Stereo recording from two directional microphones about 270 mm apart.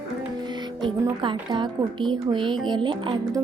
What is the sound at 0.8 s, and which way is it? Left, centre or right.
Speech, centre.